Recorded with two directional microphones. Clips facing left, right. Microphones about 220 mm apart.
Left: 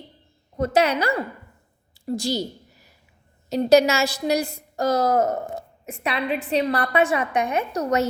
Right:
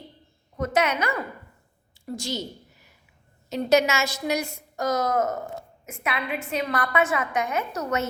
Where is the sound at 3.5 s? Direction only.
35° left (ahead or behind).